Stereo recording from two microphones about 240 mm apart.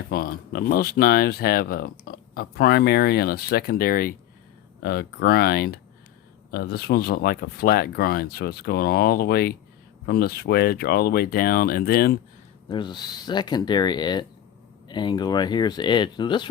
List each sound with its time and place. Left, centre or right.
0.1 s speech: left
12.6 s speech: centre